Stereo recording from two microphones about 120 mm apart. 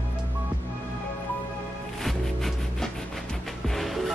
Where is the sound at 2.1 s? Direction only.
Centre (ahead or behind).